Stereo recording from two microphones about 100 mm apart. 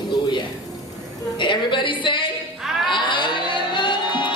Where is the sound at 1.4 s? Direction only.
55° left (ahead or behind).